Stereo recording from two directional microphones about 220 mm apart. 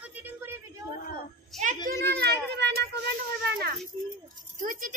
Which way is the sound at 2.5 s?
50° right (ahead or behind).